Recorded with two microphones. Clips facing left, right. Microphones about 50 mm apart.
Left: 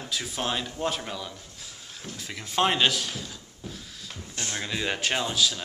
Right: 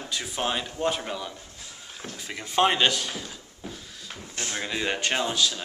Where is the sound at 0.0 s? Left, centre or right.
Centre.